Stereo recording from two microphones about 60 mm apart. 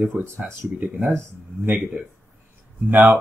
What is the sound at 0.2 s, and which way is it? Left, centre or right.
Speech, right.